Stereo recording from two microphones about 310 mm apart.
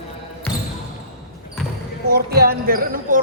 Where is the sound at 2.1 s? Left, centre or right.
Right.